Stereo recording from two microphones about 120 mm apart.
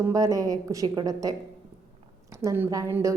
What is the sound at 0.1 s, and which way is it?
A woman's voice, 30° right (ahead or behind).